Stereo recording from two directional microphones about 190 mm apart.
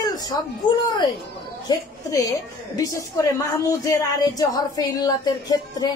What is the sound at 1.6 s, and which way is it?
A woman's voice, 20° left (ahead or behind).